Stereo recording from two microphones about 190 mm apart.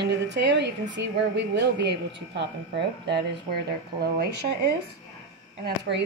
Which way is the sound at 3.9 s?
55° right (ahead or behind).